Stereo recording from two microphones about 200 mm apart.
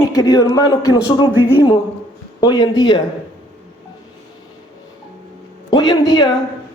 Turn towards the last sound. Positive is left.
turn(degrees=20)  # may be behind; listen again after turning